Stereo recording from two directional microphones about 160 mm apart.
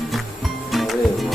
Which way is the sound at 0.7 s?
Centre (ahead or behind).